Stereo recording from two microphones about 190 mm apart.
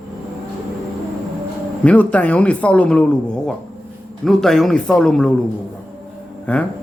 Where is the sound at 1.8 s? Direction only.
5° left (ahead or behind).